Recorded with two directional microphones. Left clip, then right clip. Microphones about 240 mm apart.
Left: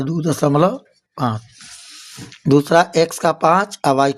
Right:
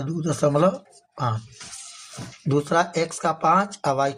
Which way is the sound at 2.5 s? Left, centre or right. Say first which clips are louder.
Left 8 dB; left.